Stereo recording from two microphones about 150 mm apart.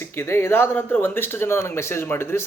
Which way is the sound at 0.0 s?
15° left (ahead or behind).